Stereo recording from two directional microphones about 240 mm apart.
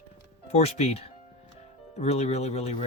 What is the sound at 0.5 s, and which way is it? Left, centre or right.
Speech, left.